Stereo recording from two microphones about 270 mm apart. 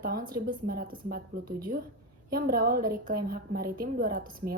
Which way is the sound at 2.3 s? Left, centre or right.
Right.